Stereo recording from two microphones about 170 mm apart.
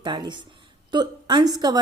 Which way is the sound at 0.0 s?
25° right (ahead or behind).